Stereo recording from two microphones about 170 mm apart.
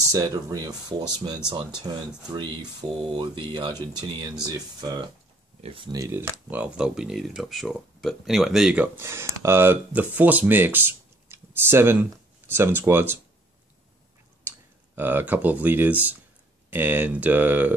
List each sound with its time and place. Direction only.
0.1 s speech: 20° right (ahead or behind)
15.0 s speech: 10° right (ahead or behind)